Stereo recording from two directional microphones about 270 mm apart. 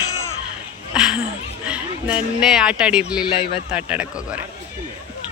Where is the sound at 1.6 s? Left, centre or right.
Centre.